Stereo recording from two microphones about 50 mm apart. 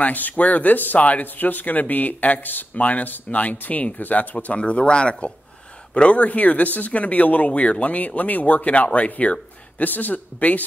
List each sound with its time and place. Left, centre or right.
0.0 s speech: left
4.6 s speech: left